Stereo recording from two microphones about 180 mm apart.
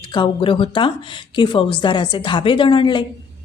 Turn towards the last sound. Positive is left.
turn(degrees=25)  # may be behind; listen again after turning